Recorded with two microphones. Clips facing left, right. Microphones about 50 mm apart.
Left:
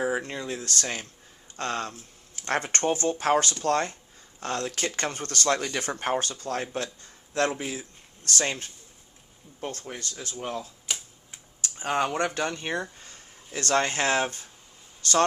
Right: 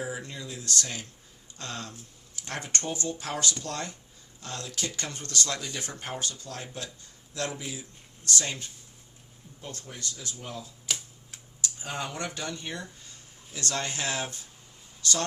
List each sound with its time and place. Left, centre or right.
0.0 s speech: left
5.6 s speech: left
10.9 s a sound: centre
11.6 s speech: left